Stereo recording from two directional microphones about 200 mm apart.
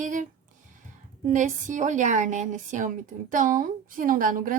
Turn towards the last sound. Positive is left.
turn(degrees=-40)  # may be behind; listen again after turning